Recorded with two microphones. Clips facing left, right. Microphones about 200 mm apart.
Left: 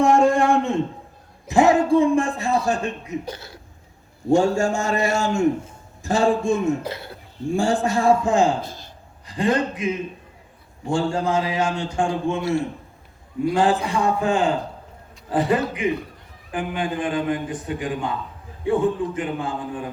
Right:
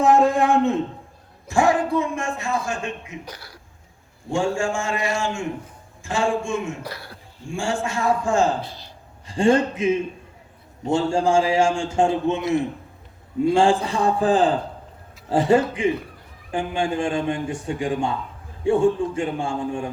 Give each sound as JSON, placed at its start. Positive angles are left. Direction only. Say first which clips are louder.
{"t": 0.0, "sound": "a sound", "louder": "left 1 dB", "side_deg": 0}
{"t": 1.5, "sound": "a man's voice", "louder": "left 3 dB", "side_deg": 20}
{"t": 3.3, "sound": "speech", "louder": "left 4 dB", "side_deg": 25}
{"t": 4.3, "sound": "a man's voice", "louder": "left 5 dB", "side_deg": 40}
{"t": 6.8, "sound": "speech", "louder": "left 4 dB", "side_deg": 25}
{"t": 7.4, "sound": "a man's voice", "louder": "left 5 dB", "side_deg": 35}
{"t": 8.6, "sound": "speech", "louder": "left 2 dB", "side_deg": 45}
{"t": 9.2, "sound": "a man's voice", "louder": "right 3 dB", "side_deg": -30}